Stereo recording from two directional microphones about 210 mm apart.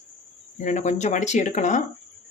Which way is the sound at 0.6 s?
35° left (ahead or behind).